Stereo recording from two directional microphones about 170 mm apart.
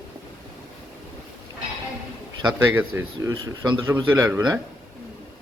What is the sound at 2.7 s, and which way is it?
Speech, 15° right (ahead or behind).